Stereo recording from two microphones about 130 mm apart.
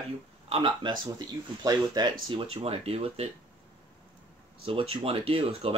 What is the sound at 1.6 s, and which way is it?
Speech, 35° right (ahead or behind).